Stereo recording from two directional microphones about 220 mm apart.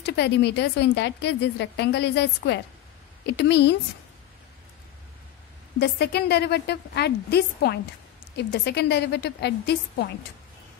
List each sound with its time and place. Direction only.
0.0 s a woman's voice: 50° left (ahead or behind)
5.8 s a woman's voice: 50° left (ahead or behind)